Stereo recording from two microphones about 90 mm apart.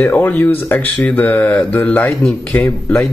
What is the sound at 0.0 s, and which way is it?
Speech, 20° left (ahead or behind).